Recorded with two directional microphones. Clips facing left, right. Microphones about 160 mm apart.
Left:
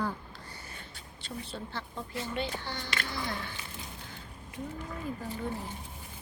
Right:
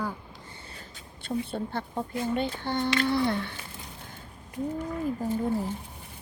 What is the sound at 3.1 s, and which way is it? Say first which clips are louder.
Speech: right 11 dB; 65° right (ahead or behind).